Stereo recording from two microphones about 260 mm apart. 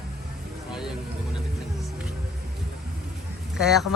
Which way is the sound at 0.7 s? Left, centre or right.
Centre.